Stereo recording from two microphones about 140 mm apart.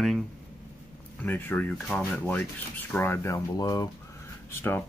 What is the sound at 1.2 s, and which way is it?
Speech, 15° left (ahead or behind).